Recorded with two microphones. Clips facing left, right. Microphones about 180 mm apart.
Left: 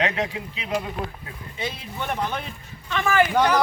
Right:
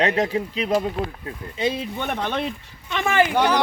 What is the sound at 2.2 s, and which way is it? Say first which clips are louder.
Speech: right 4 dB; 85° right.